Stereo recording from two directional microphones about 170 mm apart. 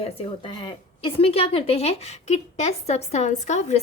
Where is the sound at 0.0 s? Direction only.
30° left (ahead or behind).